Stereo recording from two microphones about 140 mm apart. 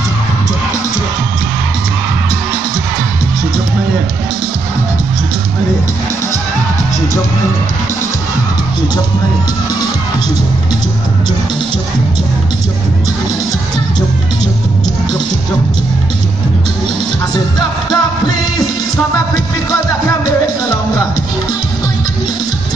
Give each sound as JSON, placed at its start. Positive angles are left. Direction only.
{"t": 17.3, "sound": "music", "side_deg": 30}
{"t": 19.3, "sound": "music", "side_deg": 25}